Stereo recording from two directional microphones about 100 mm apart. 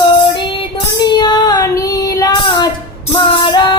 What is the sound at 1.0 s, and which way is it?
Child singing, 45° left (ahead or behind).